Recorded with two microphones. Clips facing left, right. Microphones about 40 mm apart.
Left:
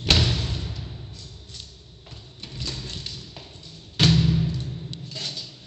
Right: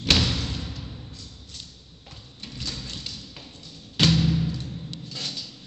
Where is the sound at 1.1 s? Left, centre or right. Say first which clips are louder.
Even; left.